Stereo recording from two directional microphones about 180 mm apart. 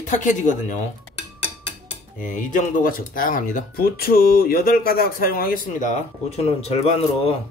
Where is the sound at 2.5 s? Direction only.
50° left (ahead or behind).